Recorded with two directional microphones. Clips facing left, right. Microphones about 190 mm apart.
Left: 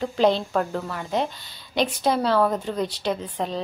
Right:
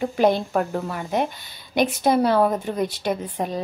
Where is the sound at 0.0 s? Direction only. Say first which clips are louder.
Right 1 dB; 15° right (ahead or behind).